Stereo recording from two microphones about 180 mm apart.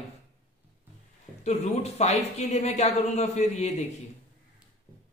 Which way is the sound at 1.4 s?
40° left (ahead or behind).